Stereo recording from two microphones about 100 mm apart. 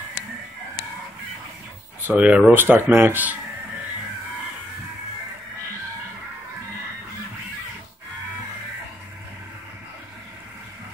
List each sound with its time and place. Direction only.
2.0 s speech: 15° right (ahead or behind)